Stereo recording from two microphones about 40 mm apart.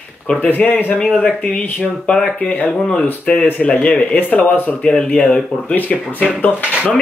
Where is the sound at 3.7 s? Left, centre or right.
Left.